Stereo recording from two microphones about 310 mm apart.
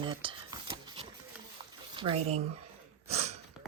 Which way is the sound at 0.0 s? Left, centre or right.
Centre.